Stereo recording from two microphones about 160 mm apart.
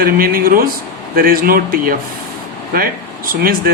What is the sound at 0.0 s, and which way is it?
Speech, 65° right (ahead or behind).